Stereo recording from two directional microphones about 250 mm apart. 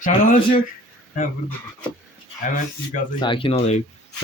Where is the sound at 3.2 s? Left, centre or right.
Centre.